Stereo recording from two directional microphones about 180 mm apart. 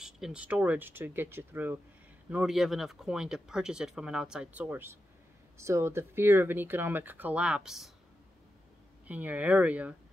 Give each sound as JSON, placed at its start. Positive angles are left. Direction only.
{"t": 0.0, "sound": "speech", "side_deg": -5}
{"t": 9.0, "sound": "speech", "side_deg": -10}